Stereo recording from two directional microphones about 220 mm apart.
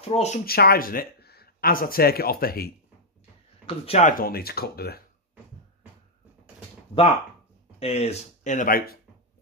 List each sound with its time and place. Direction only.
0.0 s speech: 30° left (ahead or behind)
0.5 s speech: 45° left (ahead or behind)
3.6 s speech: 25° left (ahead or behind)
4.2 s speech: 45° left (ahead or behind)
7.8 s speech: 30° left (ahead or behind)